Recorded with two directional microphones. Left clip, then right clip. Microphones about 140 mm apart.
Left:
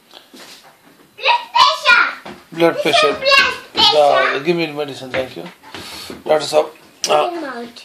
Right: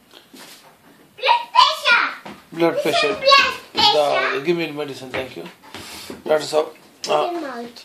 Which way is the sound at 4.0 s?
35° left (ahead or behind).